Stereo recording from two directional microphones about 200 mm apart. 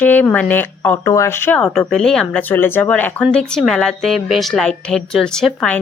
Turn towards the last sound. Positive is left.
turn(degrees=5)  # may be behind; listen again after turning